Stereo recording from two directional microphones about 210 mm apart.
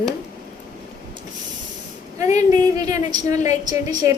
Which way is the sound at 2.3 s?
15° right (ahead or behind).